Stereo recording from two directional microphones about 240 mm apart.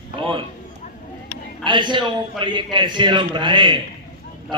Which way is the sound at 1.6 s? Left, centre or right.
Centre.